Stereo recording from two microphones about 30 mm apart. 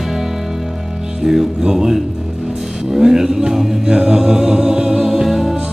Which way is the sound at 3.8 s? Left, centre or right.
Right.